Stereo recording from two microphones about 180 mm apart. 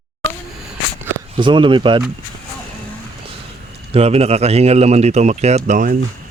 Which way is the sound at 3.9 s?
35° right (ahead or behind).